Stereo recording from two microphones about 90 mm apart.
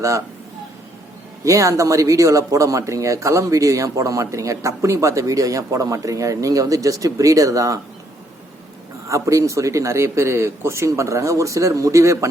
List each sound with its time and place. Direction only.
1.5 s speech: 35° right (ahead or behind)
9.0 s speech: 35° right (ahead or behind)